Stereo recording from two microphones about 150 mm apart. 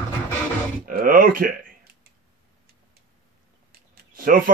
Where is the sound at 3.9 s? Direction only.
75° right (ahead or behind).